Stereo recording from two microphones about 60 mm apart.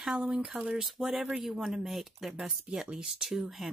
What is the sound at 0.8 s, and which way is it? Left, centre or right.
Speech, centre.